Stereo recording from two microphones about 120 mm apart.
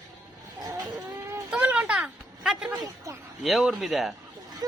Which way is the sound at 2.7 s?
30° right (ahead or behind).